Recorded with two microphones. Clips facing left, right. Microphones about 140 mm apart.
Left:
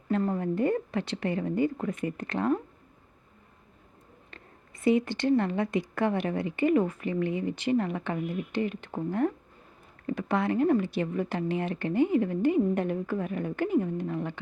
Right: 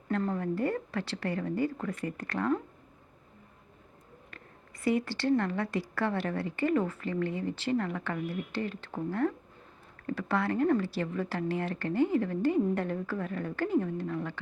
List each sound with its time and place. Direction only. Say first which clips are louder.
0.1 s a woman's voice: left 3 dB; 15° left (ahead or behind)
4.3 s a woman's voice: even; 25° left (ahead or behind)